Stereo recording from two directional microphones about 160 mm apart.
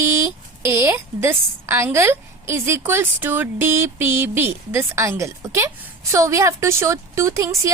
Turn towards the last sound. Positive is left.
turn(degrees=-20)  # may be behind; listen again after turning